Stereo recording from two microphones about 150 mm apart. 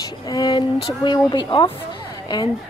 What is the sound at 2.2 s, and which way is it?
Speech, 30° left (ahead or behind).